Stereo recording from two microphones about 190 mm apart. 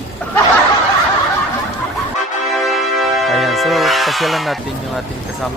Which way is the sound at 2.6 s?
Centre (ahead or behind).